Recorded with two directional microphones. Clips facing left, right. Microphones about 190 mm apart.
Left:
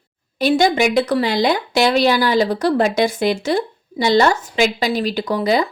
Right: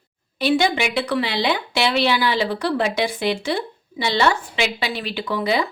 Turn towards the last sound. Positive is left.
turn(degrees=40)  # may be behind; listen again after turning